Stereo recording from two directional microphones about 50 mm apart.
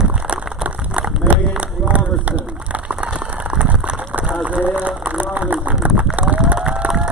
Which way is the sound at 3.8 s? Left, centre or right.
Right.